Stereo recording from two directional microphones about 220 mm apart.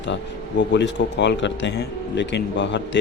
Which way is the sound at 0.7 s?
55° left (ahead or behind).